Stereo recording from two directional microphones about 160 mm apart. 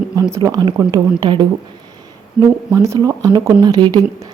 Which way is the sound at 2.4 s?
5° right (ahead or behind).